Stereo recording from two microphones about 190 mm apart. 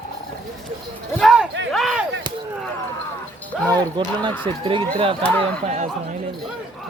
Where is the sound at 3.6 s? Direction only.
20° right (ahead or behind).